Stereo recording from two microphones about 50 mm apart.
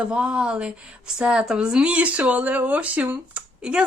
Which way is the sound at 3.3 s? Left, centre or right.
Right.